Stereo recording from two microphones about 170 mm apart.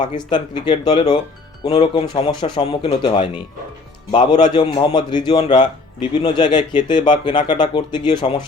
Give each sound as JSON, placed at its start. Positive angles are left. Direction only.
{"t": 0.1, "sound": "a man's voice", "side_deg": 25}